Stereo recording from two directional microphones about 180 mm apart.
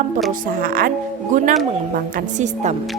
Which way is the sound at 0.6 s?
55° right (ahead or behind).